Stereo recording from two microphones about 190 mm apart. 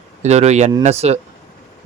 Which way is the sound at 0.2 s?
35° right (ahead or behind).